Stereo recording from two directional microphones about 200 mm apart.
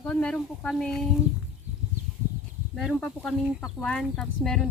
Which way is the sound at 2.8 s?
Centre (ahead or behind).